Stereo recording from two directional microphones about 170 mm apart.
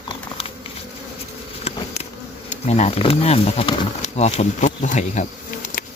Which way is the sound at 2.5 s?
40° left (ahead or behind).